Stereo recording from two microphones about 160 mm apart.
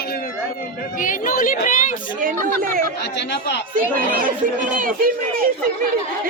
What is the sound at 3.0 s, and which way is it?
Speech, 90° left.